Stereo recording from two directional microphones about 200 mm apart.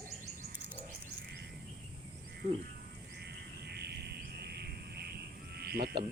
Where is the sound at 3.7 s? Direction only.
55° right (ahead or behind).